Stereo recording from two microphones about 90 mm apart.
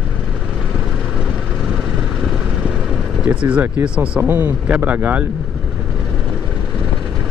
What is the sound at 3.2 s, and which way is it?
Speech, 10° right (ahead or behind).